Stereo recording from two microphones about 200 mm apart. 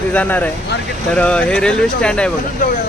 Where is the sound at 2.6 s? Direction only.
40° left (ahead or behind).